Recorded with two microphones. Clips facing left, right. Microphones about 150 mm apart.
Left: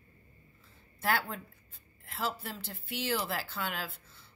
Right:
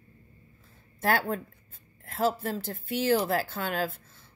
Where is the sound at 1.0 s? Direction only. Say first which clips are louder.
Right 5 dB; 45° right (ahead or behind).